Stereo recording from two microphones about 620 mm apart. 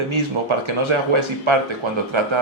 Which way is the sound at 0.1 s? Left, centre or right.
Right.